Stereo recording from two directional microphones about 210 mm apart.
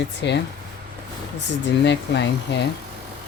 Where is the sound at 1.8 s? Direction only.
55° left (ahead or behind).